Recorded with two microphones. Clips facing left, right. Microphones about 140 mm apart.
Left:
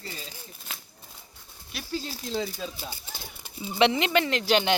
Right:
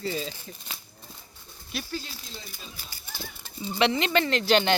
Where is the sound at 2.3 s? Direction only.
90° left.